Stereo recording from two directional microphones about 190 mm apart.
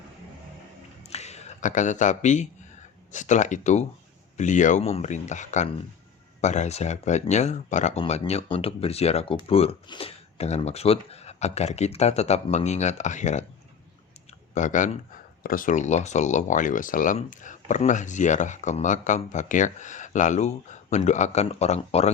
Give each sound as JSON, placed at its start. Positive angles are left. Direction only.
{"t": 1.0, "sound": "a sound", "side_deg": 35}
{"t": 3.1, "sound": "speech", "side_deg": 40}
{"t": 14.5, "sound": "speech", "side_deg": 40}